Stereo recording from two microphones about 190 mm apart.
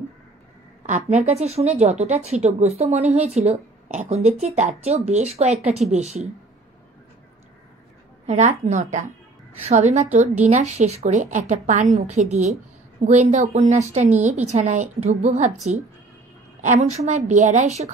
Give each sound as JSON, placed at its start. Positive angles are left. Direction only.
{"t": 0.8, "sound": "a woman's voice", "side_deg": -40}
{"t": 8.3, "sound": "a woman's voice", "side_deg": -35}
{"t": 16.6, "sound": "a woman's voice", "side_deg": -40}